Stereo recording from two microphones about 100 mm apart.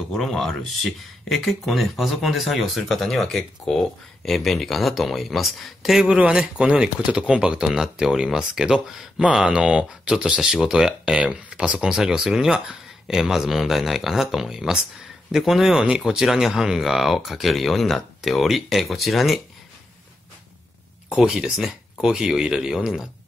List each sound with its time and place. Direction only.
0.1 s speech: 5° left (ahead or behind)
21.1 s speech: 5° right (ahead or behind)